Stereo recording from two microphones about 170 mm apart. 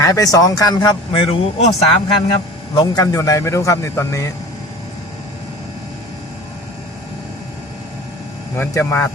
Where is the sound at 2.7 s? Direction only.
20° left (ahead or behind).